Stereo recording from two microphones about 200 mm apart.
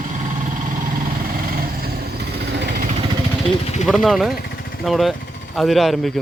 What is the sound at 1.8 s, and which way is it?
Vehicle, 50° right (ahead or behind).